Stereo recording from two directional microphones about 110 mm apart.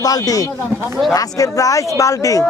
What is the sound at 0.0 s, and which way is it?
A man's voice, 35° left (ahead or behind).